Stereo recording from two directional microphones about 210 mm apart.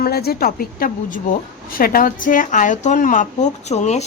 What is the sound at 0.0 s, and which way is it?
A woman's voice, 50° left (ahead or behind).